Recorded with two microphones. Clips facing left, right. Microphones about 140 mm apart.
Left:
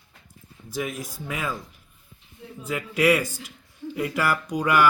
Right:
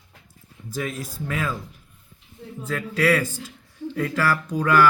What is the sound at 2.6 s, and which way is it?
Speech, 15° left (ahead or behind).